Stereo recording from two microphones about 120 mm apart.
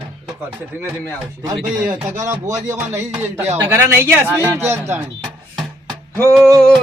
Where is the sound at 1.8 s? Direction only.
30° right (ahead or behind).